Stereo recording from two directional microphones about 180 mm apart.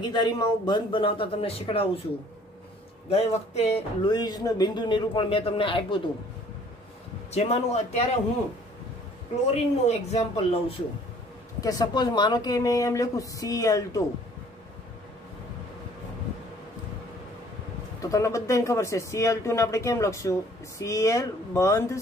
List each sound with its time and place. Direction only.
0.1 s speech: 25° left (ahead or behind)
3.1 s speech: 35° left (ahead or behind)
7.3 s speech: 35° left (ahead or behind)
9.5 s speech: 35° left (ahead or behind)
11.6 s speech: 25° left (ahead or behind)
18.0 s speech: 20° left (ahead or behind)